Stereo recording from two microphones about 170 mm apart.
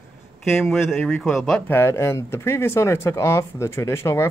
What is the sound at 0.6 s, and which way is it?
Speech, centre (ahead or behind).